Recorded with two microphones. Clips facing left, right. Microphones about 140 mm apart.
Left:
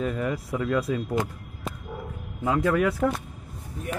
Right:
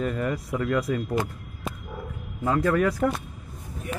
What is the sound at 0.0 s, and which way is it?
Speech, 5° left (ahead or behind).